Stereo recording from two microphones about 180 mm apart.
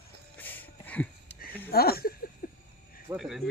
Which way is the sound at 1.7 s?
60° left (ahead or behind).